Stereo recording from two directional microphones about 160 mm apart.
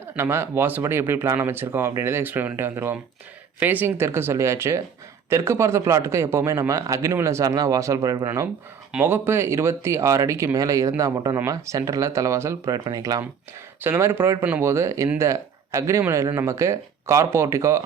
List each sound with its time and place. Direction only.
0.2 s speech: 15° right (ahead or behind)